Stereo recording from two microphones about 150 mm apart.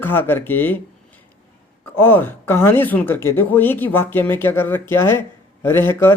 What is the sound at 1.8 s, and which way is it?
Speech, 15° left (ahead or behind).